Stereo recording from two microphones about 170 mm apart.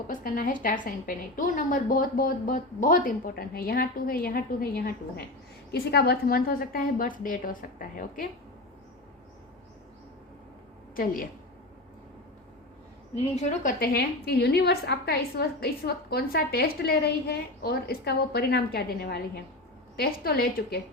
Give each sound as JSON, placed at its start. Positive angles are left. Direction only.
{"t": 0.1, "sound": "a woman's voice", "side_deg": 55}
{"t": 10.9, "sound": "a woman's voice", "side_deg": 55}
{"t": 13.1, "sound": "a woman's voice", "side_deg": 40}